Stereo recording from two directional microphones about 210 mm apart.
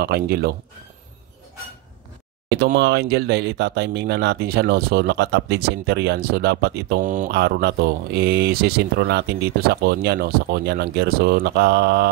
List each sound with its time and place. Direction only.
0.0 s speech: 50° right (ahead or behind)
2.6 s speech: 50° right (ahead or behind)
7.2 s speech: 50° right (ahead or behind)